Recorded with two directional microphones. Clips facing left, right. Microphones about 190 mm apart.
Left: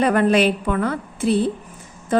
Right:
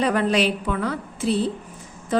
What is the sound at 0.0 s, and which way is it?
A woman's voice, 55° left (ahead or behind).